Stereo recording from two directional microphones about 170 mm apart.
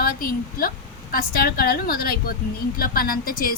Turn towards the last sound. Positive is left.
turn(degrees=60)  # may be behind; listen again after turning